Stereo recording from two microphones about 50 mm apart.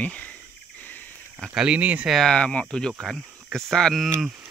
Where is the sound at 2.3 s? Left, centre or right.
Left.